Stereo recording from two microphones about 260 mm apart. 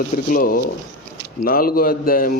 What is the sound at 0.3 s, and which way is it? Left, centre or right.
Speech, left.